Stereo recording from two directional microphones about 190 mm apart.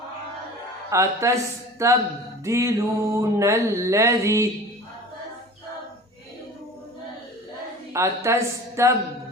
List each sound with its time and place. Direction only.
0.9 s speech: 15° right (ahead or behind)
7.9 s speech: 15° right (ahead or behind)